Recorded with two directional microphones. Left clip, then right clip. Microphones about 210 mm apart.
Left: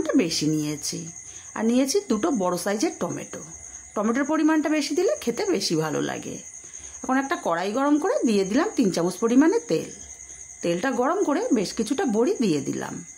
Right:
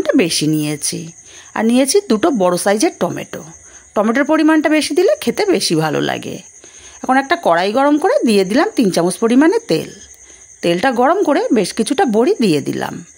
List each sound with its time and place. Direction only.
0.0 s speech: 35° right (ahead or behind)